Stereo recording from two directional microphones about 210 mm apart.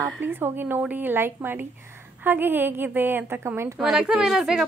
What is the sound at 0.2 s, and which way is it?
A woman's voice, 10° right (ahead or behind).